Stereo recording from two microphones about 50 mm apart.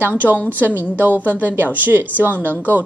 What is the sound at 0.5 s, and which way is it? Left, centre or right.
A woman's voice, right.